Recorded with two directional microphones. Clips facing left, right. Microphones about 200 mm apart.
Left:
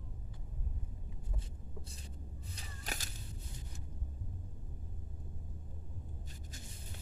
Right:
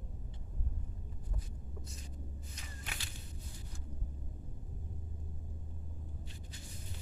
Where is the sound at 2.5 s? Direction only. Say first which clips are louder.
Left 6 dB; 40° left (ahead or behind).